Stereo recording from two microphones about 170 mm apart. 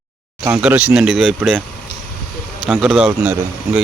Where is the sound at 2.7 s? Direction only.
5° right (ahead or behind).